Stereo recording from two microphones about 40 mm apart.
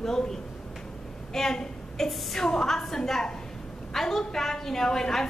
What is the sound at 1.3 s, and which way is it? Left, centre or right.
A woman's voice, centre.